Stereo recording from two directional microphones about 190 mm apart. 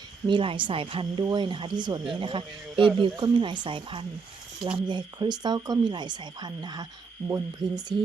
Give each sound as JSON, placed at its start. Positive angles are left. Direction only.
{"t": 0.3, "sound": "speech", "side_deg": -25}